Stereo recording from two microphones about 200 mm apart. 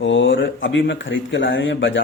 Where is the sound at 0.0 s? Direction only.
70° left (ahead or behind).